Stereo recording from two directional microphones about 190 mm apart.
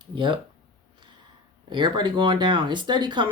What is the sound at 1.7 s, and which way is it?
Speech, 25° right (ahead or behind).